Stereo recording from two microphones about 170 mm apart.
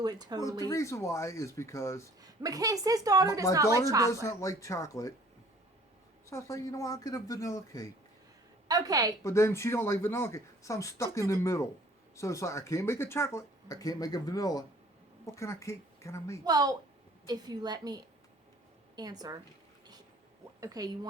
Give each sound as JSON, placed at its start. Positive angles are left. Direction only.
{"t": 0.0, "sound": "a woman's voice", "side_deg": -25}
{"t": 0.6, "sound": "speech", "side_deg": 20}
{"t": 2.2, "sound": "a woman's voice", "side_deg": -20}
{"t": 4.1, "sound": "speech", "side_deg": 15}
{"t": 6.3, "sound": "speech", "side_deg": 20}
{"t": 8.6, "sound": "a woman's voice", "side_deg": -20}
{"t": 9.2, "sound": "speech", "side_deg": 15}
{"t": 16.4, "sound": "a woman's voice", "side_deg": -20}
{"t": 20.6, "sound": "a woman's voice", "side_deg": -20}